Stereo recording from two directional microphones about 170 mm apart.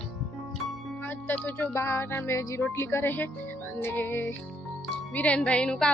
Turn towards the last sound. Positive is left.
turn(degrees=5)  # may be behind; listen again after turning